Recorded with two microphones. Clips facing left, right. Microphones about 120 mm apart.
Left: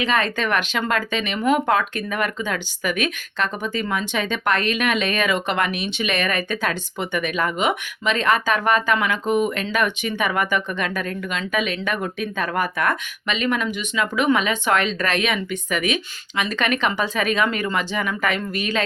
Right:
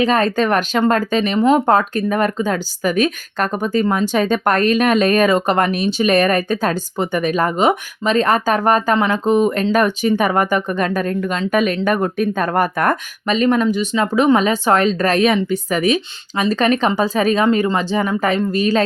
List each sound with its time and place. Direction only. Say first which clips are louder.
0.0 s speech: right 6 dB; 40° right (ahead or behind)